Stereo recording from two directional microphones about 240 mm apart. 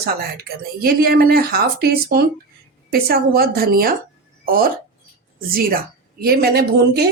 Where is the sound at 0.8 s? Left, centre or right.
Right.